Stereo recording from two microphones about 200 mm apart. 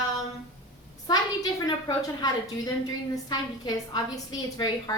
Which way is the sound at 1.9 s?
20° left (ahead or behind).